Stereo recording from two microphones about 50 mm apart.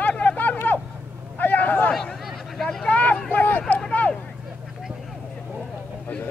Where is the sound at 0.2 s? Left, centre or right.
Left.